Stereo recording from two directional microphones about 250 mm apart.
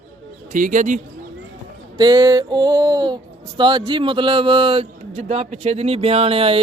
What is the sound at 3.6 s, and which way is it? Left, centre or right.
Speech, centre.